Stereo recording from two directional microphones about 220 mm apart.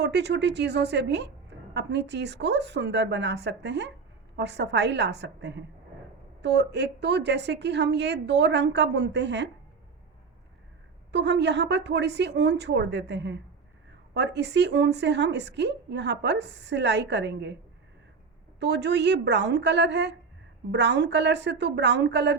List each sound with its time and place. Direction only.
0.0 s a woman's voice: 50° right (ahead or behind)
11.1 s a woman's voice: 50° right (ahead or behind)
18.6 s a woman's voice: 50° right (ahead or behind)